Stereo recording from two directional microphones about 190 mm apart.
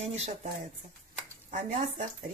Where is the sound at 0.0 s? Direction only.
35° right (ahead or behind).